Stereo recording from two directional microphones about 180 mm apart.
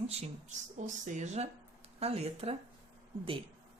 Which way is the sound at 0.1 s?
35° right (ahead or behind).